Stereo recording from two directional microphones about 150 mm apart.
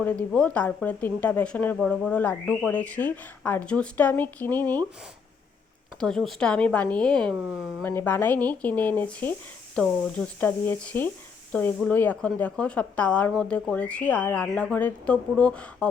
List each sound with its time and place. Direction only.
0.0 s speech: 10° left (ahead or behind)
6.0 s a woman's voice: 5° left (ahead or behind)